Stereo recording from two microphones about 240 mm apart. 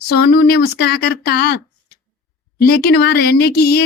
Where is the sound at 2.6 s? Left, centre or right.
Left.